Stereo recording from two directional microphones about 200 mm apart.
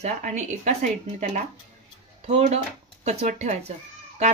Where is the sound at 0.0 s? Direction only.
35° right (ahead or behind).